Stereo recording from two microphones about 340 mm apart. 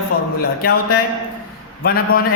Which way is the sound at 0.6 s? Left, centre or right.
Left.